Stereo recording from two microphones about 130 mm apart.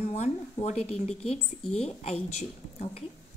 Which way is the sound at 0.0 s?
55° left (ahead or behind).